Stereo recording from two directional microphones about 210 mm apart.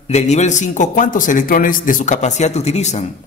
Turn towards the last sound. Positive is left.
turn(degrees=30)  # may be behind; listen again after turning